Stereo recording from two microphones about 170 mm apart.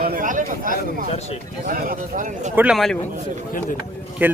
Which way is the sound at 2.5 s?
10° right (ahead or behind).